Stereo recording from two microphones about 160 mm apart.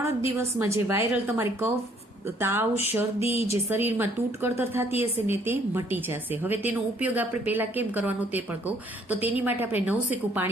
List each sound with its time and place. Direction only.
0.3 s a woman's voice: 15° right (ahead or behind)
3.2 s speech: 40° left (ahead or behind)
3.7 s a woman's voice: 15° right (ahead or behind)